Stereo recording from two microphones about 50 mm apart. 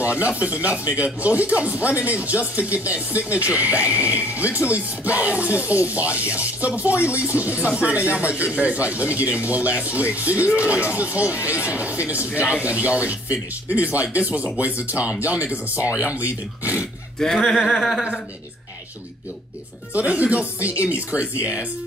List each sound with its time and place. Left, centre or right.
0.0 s speech: right
17.2 s a sound: centre
17.6 s speech: centre
19.9 s speech: right